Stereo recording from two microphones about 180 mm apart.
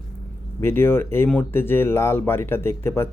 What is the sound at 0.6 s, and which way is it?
Speech, 10° left (ahead or behind).